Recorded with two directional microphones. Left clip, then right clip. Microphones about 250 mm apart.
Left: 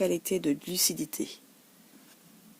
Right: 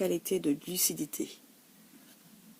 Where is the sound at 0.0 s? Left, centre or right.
Left.